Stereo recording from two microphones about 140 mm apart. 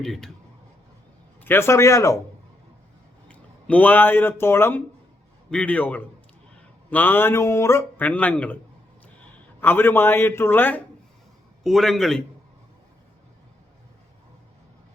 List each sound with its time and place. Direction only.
0.0 s a man's voice: 5° left (ahead or behind)
1.4 s speech: 15° left (ahead or behind)
3.2 s a man's voice: 10° left (ahead or behind)
9.6 s a man's voice: 15° left (ahead or behind)
11.6 s a man's voice: centre (ahead or behind)